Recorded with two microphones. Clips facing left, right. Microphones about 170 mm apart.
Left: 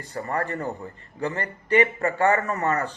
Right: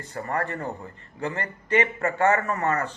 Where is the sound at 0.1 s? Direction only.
35° left (ahead or behind).